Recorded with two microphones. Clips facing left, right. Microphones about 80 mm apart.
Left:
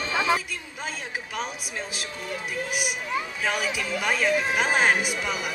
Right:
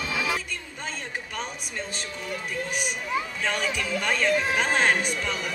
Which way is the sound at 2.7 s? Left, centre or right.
Centre.